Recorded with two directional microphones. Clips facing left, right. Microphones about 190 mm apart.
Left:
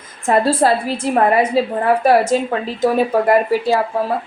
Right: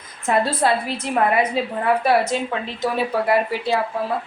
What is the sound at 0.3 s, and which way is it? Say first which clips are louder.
A woman's voice: left 5 dB; 40° left (ahead or behind).